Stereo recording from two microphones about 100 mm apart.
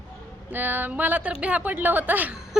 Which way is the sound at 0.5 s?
20° right (ahead or behind).